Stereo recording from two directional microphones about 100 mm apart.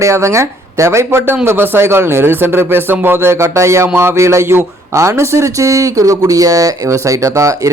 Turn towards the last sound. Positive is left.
turn(degrees=-30)  # may be behind; listen again after turning